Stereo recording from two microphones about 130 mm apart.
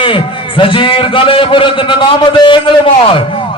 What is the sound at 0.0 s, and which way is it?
A man's voice, 40° left (ahead or behind).